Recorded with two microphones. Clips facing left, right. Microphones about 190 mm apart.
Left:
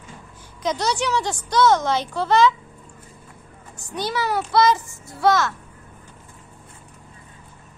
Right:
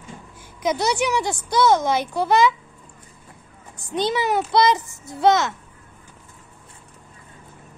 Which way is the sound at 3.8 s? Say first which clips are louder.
Right 3 dB; 20° right (ahead or behind).